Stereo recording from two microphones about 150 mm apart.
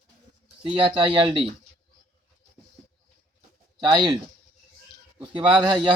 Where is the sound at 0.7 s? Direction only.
35° right (ahead or behind).